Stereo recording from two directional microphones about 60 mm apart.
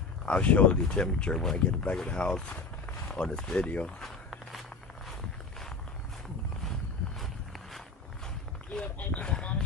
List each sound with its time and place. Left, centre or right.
0.2 s speech: left
4.0 s walk: centre
8.7 s speech: centre